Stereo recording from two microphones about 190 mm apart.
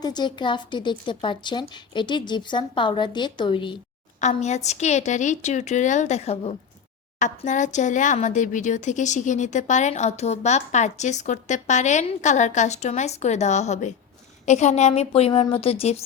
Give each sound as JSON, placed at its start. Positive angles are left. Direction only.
{"t": 0.0, "sound": "a woman's voice", "side_deg": 20}
{"t": 4.2, "sound": "speech", "side_deg": 35}